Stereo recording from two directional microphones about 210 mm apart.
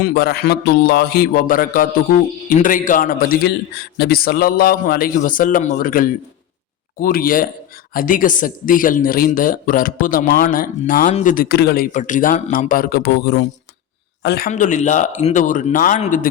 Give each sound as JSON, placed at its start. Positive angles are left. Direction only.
{"t": 0.0, "sound": "a man's voice", "side_deg": 50}
{"t": 14.5, "sound": "speech", "side_deg": 35}